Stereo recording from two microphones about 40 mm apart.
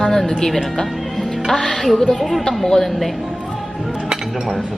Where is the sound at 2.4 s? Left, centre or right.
Centre.